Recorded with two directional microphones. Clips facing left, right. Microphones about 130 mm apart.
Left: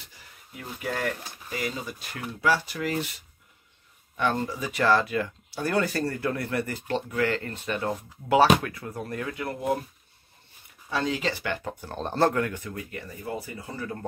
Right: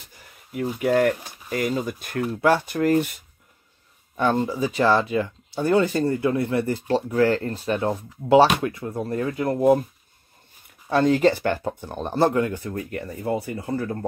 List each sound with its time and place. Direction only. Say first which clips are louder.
0.5 s speech: right 11 dB; 60° right (ahead or behind)
4.2 s speech: right 6 dB; 30° right (ahead or behind)
10.9 s speech: right 10 dB; 50° right (ahead or behind)
11.8 s speech: right 2 dB; 15° right (ahead or behind)
12.5 s speech: right 6 dB; 35° right (ahead or behind)
12.9 s speech: right 9 dB; 60° right (ahead or behind)